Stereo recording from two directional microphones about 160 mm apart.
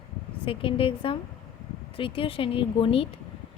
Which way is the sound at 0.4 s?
35° left (ahead or behind).